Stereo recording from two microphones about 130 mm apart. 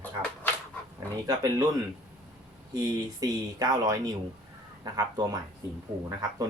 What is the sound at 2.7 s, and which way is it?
Speech, 30° right (ahead or behind).